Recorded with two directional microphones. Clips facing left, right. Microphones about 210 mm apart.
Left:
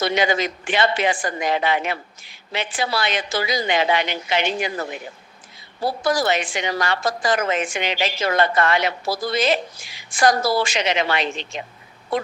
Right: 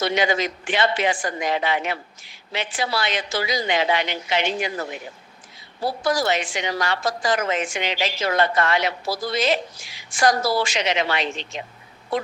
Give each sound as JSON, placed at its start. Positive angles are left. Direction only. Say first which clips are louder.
{"t": 0.0, "sound": "a woman's voice", "louder": "left 1 dB", "side_deg": 55}
{"t": 6.1, "sound": "a woman's voice", "louder": "left 1 dB", "side_deg": 55}